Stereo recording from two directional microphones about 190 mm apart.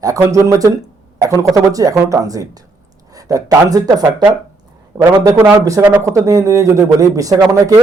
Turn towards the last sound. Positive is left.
turn(degrees=-20)  # may be behind; listen again after turning